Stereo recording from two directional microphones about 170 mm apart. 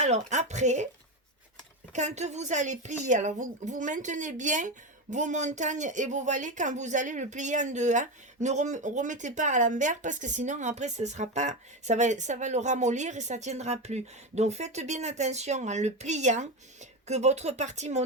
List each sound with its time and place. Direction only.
0.0 s speech: 40° right (ahead or behind)
1.9 s speech: 45° right (ahead or behind)